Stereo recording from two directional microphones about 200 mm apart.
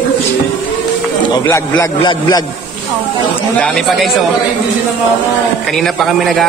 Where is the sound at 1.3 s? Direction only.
20° left (ahead or behind).